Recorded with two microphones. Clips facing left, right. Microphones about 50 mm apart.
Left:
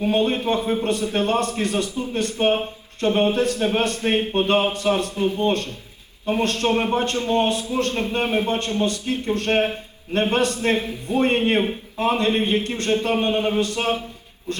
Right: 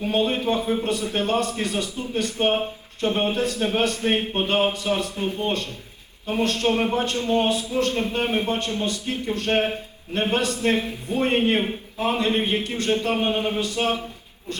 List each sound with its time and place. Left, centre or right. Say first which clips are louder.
0.0 s a man's voice: left 2 dB; left